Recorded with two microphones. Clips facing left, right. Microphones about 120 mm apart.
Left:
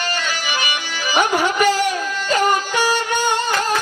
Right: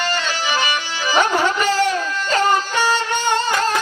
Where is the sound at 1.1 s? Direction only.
15° left (ahead or behind).